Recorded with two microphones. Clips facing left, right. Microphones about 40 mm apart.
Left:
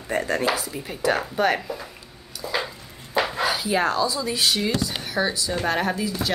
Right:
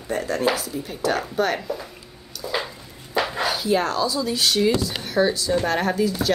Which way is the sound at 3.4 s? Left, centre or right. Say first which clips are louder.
Right 1 dB; centre.